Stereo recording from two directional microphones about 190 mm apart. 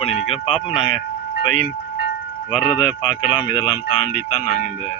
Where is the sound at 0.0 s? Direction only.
30° left (ahead or behind).